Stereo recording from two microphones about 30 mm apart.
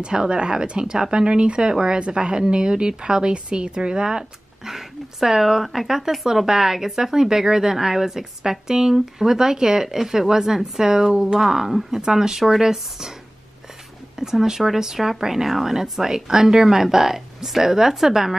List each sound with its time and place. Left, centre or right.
0.0 s speech: right
4.6 s speech: centre
11.3 s speech: centre
14.4 s speech: centre